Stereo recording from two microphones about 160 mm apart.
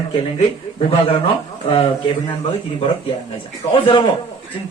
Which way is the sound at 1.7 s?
40° left (ahead or behind).